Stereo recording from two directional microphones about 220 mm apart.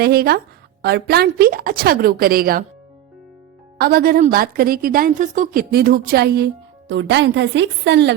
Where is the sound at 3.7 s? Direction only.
45° right (ahead or behind).